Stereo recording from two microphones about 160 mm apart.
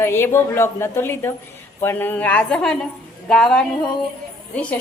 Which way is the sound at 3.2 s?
5° left (ahead or behind).